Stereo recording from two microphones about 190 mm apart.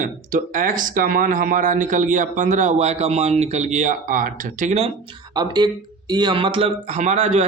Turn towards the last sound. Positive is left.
turn(degrees=-35)  # may be behind; listen again after turning